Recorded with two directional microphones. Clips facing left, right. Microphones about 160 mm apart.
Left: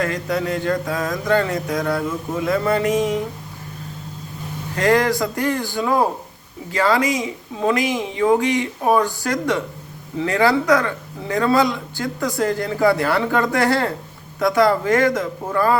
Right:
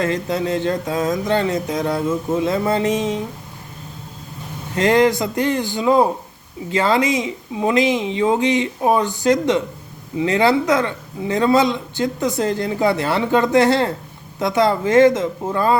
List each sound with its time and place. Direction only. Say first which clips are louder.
0.0 s a man's voice: right 2 dB; 25° right (ahead or behind)
4.8 s a man's voice: right 2 dB; 20° right (ahead or behind)